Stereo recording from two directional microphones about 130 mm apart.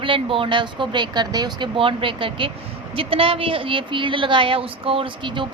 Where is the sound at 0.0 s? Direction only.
40° right (ahead or behind).